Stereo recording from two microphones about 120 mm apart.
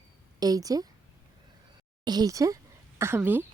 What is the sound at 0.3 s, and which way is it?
Speech, 30° right (ahead or behind).